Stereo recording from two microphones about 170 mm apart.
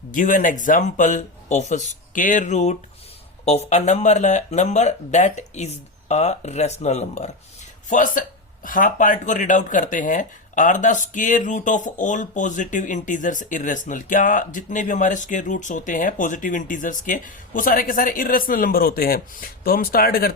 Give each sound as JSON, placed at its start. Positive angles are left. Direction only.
{"t": 0.1, "sound": "speech", "side_deg": 50}